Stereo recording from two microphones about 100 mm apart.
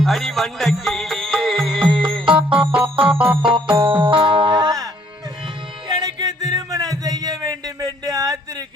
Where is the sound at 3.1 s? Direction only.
10° right (ahead or behind).